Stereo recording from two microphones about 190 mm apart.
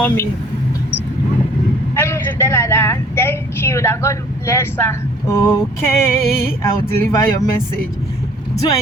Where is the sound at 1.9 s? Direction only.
15° left (ahead or behind).